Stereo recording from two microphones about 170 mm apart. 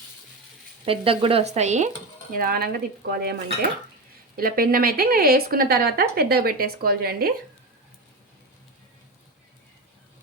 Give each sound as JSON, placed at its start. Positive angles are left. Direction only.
{"t": 0.9, "sound": "sizzle", "side_deg": -35}
{"t": 2.3, "sound": "a woman's voice", "side_deg": -60}
{"t": 4.4, "sound": "a woman's voice", "side_deg": -60}